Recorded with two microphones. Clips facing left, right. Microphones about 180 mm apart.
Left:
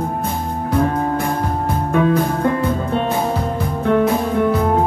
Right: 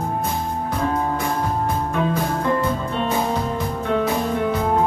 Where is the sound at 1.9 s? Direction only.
55° left (ahead or behind).